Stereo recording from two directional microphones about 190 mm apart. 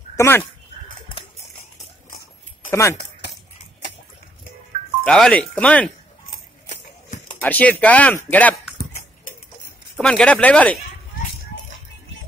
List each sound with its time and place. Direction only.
0.1 s speech: 15° left (ahead or behind)
2.7 s speech: 15° left (ahead or behind)
5.0 s speech: 5° left (ahead or behind)
7.4 s speech: 10° left (ahead or behind)
9.9 s speech: 5° left (ahead or behind)